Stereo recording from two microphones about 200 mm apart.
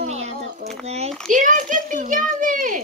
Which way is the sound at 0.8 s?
30° right (ahead or behind).